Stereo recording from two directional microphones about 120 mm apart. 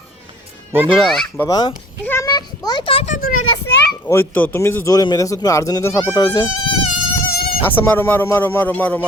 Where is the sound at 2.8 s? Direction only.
50° left (ahead or behind).